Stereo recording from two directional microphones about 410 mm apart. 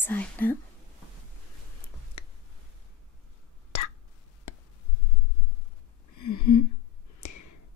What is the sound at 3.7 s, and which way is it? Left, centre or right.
Whispering, left.